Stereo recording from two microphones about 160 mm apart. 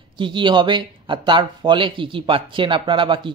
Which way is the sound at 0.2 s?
30° right (ahead or behind).